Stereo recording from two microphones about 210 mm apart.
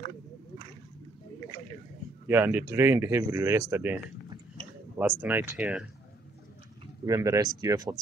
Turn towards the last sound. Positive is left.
turn(degrees=-15)  # may be behind; listen again after turning